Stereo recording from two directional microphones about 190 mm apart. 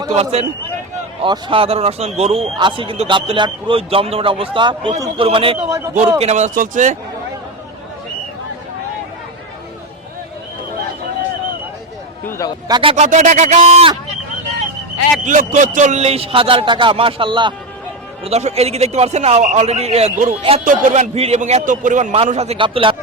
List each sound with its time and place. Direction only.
0.1 s a man's voice: 35° right (ahead or behind)
12.3 s speech: 15° left (ahead or behind)
12.6 s a man's voice: 25° right (ahead or behind)
13.1 s a man's voice: 40° right (ahead or behind)
15.2 s a man's voice: 40° right (ahead or behind)